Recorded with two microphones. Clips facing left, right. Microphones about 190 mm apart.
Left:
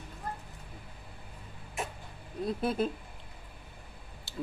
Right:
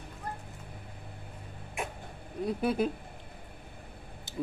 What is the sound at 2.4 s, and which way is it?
Speech, 10° right (ahead or behind).